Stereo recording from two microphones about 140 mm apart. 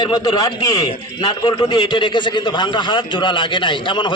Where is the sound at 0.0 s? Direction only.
30° left (ahead or behind).